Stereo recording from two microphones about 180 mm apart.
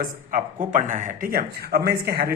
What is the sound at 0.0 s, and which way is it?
Speech, 50° right (ahead or behind).